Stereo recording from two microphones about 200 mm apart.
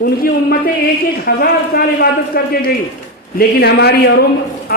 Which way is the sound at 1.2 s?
50° left (ahead or behind).